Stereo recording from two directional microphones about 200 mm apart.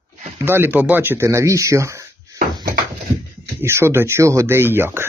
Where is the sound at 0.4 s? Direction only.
10° right (ahead or behind).